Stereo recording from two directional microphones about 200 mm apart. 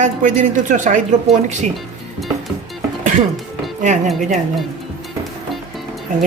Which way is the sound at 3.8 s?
40° right (ahead or behind).